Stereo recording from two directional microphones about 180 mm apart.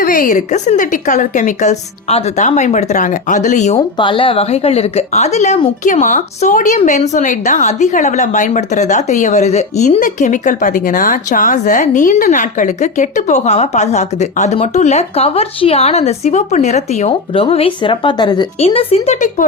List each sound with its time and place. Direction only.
0.0 s a woman's voice: 50° left (ahead or behind)
3.8 s a woman's voice: 25° left (ahead or behind); by 19.5 s 40° left (ahead or behind)